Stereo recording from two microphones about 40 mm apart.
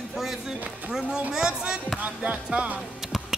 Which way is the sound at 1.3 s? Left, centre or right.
Right.